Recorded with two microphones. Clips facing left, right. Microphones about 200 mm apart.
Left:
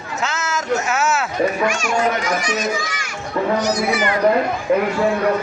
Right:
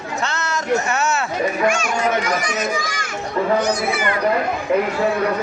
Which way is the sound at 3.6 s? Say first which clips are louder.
Left 1 dB; 55° right (ahead or behind).